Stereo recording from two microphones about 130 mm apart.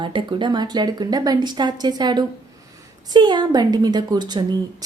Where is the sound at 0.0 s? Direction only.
35° right (ahead or behind).